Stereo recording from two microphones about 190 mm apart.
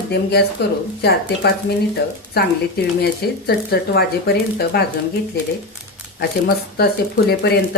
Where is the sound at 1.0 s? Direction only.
60° left (ahead or behind).